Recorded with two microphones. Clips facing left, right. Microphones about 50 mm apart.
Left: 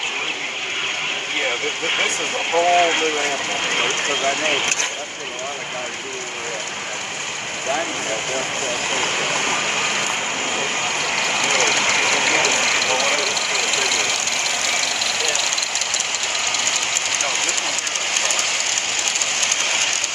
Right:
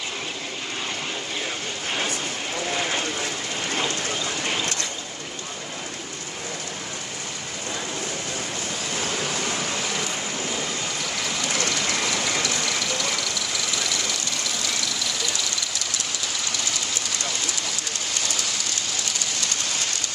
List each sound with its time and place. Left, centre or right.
1.4 s speech: left
8.9 s stream: left
16.3 s train: left